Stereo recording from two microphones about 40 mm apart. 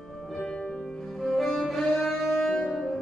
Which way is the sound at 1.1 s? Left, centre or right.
Centre.